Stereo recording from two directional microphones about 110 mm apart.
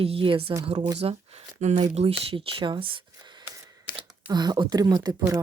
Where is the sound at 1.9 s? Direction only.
60° right (ahead or behind).